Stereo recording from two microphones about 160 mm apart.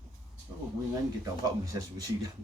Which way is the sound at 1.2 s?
20° right (ahead or behind).